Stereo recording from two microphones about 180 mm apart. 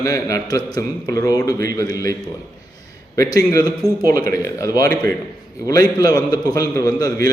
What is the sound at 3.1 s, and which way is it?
A man's voice, 20° left (ahead or behind).